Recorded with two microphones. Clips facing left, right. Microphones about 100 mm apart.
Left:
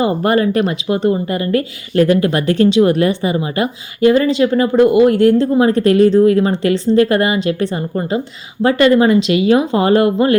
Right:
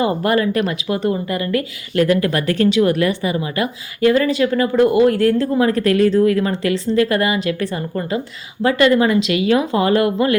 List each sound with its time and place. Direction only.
0.0 s speech: 30° left (ahead or behind)